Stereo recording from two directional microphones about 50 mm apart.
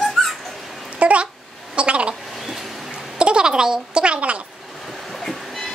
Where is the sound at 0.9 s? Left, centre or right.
Right.